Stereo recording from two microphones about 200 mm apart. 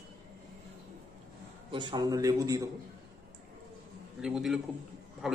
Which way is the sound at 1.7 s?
20° right (ahead or behind).